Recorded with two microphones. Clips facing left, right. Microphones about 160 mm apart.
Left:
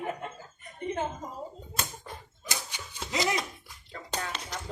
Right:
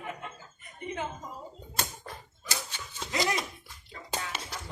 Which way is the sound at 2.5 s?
15° left (ahead or behind).